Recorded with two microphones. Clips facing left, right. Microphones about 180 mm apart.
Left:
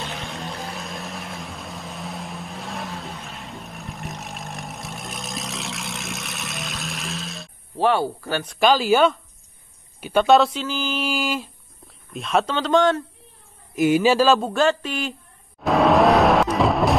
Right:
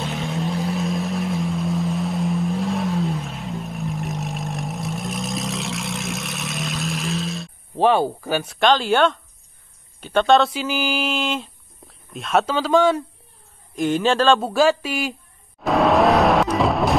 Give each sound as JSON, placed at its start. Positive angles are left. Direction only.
{"t": 0.0, "sound": "vehicle", "side_deg": 0}
{"t": 7.7, "sound": "speech", "side_deg": -20}
{"t": 8.5, "sound": "mantra", "side_deg": 5}
{"t": 9.9, "sound": "a man's voice", "side_deg": 10}
{"t": 10.5, "sound": "mantra", "side_deg": -10}
{"t": 12.1, "sound": "speech", "side_deg": 0}
{"t": 13.7, "sound": "a man's voice", "side_deg": 10}
{"t": 14.4, "sound": "speech", "side_deg": -10}
{"t": 15.6, "sound": "vehicle", "side_deg": 0}